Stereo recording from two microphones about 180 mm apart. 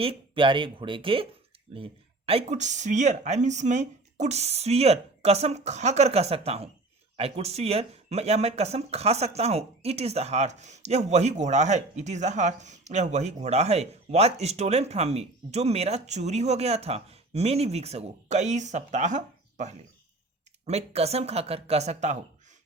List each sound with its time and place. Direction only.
0.0 s speech: 30° right (ahead or behind)